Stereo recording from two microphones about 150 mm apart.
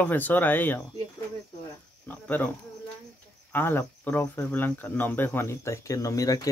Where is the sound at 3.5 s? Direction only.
15° left (ahead or behind).